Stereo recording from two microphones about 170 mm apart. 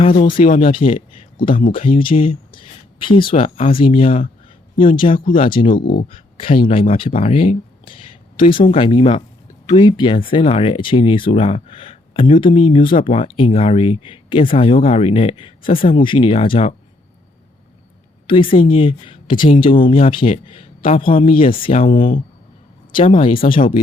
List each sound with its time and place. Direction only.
0.4 s speech: 55° left (ahead or behind)
0.7 s speech: 30° left (ahead or behind)
5.7 s speech: 55° left (ahead or behind)
6.1 s speech: 30° left (ahead or behind)
18.3 s speech: 30° left (ahead or behind)
21.2 s speech: 55° left (ahead or behind)
21.6 s speech: 35° left (ahead or behind)
21.8 s speech: 55° left (ahead or behind)
22.9 s speech: 30° left (ahead or behind)
23.5 s speech: 55° left (ahead or behind)